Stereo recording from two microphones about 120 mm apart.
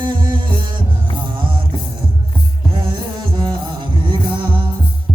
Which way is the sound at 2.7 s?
40° right (ahead or behind).